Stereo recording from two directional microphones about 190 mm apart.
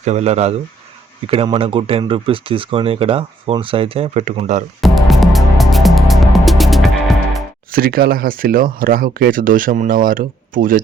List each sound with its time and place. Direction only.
0.0 s speech: 35° right (ahead or behind)
4.8 s music: centre (ahead or behind)
7.7 s speech: 50° right (ahead or behind)